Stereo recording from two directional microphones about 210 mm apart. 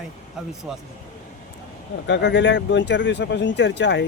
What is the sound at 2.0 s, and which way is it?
Speech, 55° left (ahead or behind).